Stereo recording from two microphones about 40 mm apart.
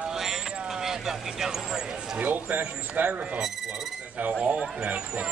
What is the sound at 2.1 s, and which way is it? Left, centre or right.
Speech, right.